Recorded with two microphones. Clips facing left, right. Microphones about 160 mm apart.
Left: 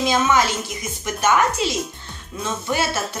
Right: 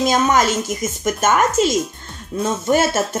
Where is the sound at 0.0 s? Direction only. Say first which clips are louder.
Right 3 dB; 45° right (ahead or behind).